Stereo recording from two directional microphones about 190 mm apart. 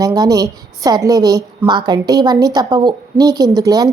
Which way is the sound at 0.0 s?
20° right (ahead or behind).